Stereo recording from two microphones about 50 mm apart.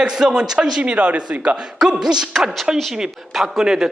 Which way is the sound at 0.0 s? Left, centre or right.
Centre.